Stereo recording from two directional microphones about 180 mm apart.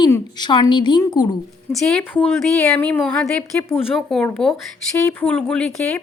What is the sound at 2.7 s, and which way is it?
A woman's voice, 10° left (ahead or behind).